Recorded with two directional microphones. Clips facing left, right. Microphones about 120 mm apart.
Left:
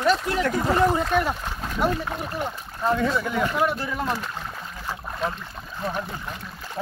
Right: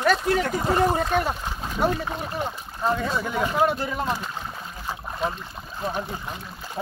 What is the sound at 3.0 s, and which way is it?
Speech, 15° right (ahead or behind).